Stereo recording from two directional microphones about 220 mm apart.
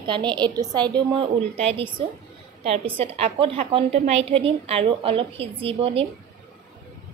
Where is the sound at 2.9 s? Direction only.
25° right (ahead or behind).